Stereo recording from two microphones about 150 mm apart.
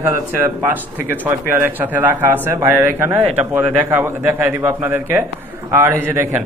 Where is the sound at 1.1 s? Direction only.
15° right (ahead or behind).